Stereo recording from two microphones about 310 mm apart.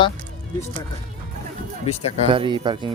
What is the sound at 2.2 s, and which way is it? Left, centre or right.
Speech, centre.